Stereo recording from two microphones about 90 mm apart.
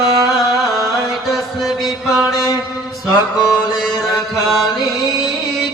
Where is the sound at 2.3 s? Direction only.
45° left (ahead or behind).